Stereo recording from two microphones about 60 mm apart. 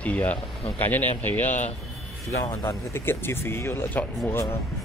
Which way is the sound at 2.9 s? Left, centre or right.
Left.